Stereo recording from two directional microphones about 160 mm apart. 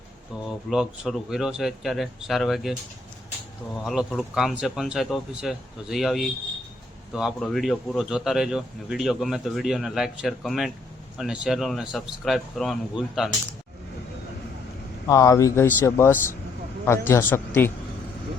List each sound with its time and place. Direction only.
0.7 s speech: centre (ahead or behind)
3.8 s speech: centre (ahead or behind)
15.0 s speech: 20° left (ahead or behind)